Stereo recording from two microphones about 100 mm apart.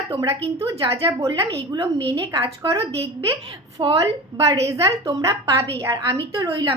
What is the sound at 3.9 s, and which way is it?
A woman's voice, 35° right (ahead or behind).